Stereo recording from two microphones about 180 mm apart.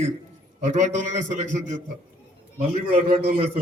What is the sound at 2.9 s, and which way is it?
Speech, 35° right (ahead or behind).